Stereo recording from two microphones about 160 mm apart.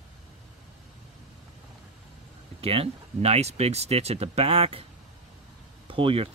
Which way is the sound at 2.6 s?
35° right (ahead or behind).